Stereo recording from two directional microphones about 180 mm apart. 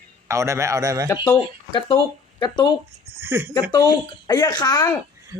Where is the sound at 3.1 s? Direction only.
15° right (ahead or behind).